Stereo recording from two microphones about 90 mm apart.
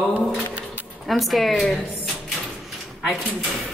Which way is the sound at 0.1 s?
20° right (ahead or behind).